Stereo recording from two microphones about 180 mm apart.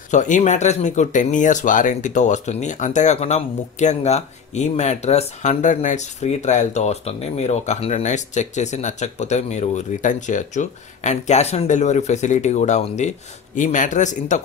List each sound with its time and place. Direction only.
0.1 s speech: 40° left (ahead or behind)